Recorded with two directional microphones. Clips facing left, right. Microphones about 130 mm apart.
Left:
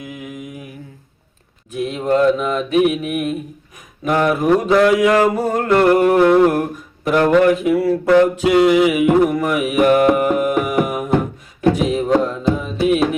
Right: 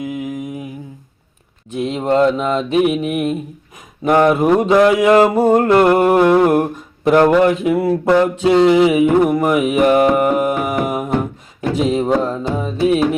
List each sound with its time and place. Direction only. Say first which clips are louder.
1.7 s music: right 1 dB; 25° right (ahead or behind)
6.2 s mantra: even; 15° right (ahead or behind)
6.5 s a sound: right 4 dB; 25° right (ahead or behind)
7.4 s music: even; 25° right (ahead or behind)